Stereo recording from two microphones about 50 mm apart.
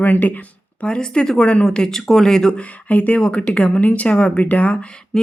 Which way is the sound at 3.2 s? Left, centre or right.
Centre.